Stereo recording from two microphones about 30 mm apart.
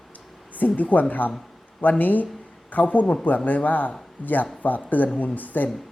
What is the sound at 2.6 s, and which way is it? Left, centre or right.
A man's voice, left.